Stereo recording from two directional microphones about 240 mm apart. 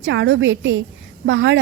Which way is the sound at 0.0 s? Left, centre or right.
Right.